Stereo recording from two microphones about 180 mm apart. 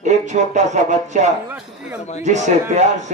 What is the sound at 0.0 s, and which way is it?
A man's voice, 40° right (ahead or behind).